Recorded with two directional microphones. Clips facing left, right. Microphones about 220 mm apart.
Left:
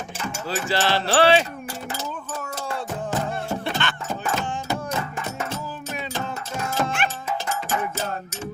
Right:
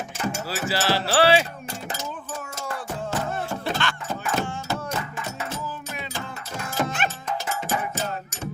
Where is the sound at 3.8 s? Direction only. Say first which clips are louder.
Even; centre (ahead or behind).